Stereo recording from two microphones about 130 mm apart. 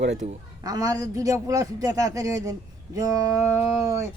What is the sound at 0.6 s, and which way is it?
Speech, 30° right (ahead or behind).